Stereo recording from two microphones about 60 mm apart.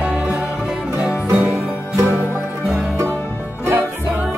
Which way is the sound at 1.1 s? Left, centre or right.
Centre.